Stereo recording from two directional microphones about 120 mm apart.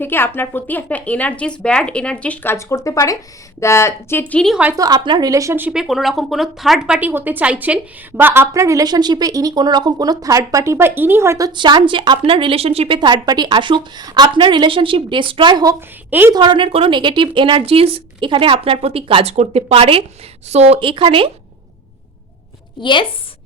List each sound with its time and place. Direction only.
0.0 s speech: 20° left (ahead or behind)
4.8 s a woman's voice: 35° right (ahead or behind)
5.7 s a woman's voice: 5° right (ahead or behind); by 13.0 s 55° right (ahead or behind)
13.0 s a woman's voice: 35° right (ahead or behind)
16.0 s a woman's voice: 15° right (ahead or behind)
16.3 s speech: 40° right (ahead or behind)
19.3 s speech: 65° right (ahead or behind); by 21.2 s 45° right (ahead or behind)
22.8 s a woman's voice: 40° left (ahead or behind)